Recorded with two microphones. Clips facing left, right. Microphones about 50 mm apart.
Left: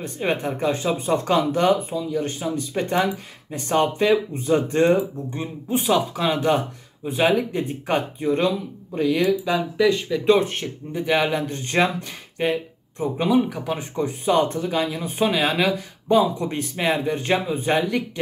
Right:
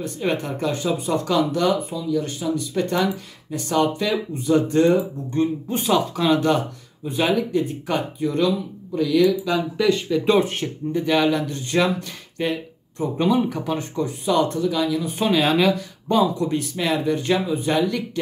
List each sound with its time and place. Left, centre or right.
0.0 s speech: left
5.3 s speech: centre; by 9.5 s left
9.5 s speech: centre
11.0 s speech: left
12.4 s speech: left
13.0 s speech: centre
13.9 s speech: left
15.1 s speech: centre
16.3 s speech: left